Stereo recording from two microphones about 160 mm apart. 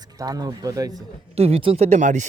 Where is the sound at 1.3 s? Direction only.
40° right (ahead or behind).